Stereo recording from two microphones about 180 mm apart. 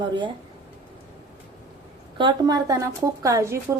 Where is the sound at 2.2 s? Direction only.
25° right (ahead or behind).